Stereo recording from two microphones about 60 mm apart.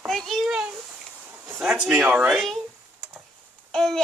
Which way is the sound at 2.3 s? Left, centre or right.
Centre.